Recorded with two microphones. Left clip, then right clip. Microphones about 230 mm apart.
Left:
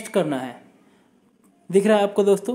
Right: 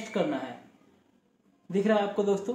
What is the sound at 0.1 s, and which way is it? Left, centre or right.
Speech, left.